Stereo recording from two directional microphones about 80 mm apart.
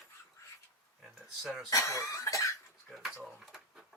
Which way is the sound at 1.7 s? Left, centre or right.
Left.